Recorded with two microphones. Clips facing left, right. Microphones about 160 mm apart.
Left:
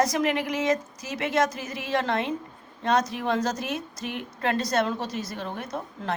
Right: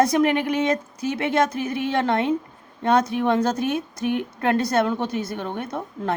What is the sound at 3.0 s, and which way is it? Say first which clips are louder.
Speech: right 5 dB; 55° right (ahead or behind).